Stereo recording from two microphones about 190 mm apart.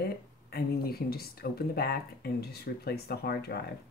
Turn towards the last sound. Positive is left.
turn(degrees=55)  # may be behind; listen again after turning